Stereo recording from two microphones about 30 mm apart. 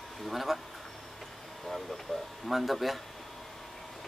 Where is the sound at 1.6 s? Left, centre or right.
Centre.